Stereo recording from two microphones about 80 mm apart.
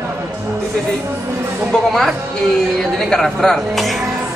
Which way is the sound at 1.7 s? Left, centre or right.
Centre.